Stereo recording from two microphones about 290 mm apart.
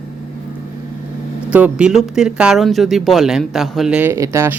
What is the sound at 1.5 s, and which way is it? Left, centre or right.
Speech, centre.